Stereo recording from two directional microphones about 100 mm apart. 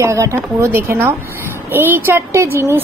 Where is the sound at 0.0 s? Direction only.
30° right (ahead or behind).